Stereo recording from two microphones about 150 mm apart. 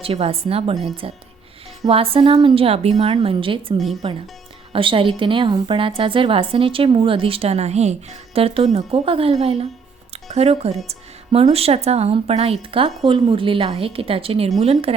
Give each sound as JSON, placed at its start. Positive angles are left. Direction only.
{"t": 0.0, "sound": "a woman's voice", "side_deg": -40}
{"t": 10.8, "sound": "music", "side_deg": -40}
{"t": 11.5, "sound": "a woman's voice", "side_deg": -40}